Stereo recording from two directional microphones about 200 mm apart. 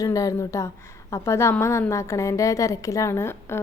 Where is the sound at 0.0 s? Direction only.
15° left (ahead or behind).